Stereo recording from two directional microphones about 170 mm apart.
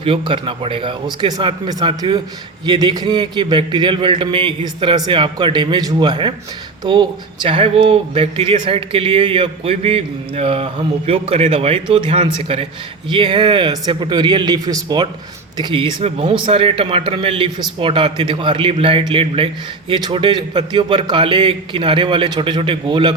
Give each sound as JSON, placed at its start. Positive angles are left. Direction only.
{"t": 0.0, "sound": "a man's voice", "side_deg": -30}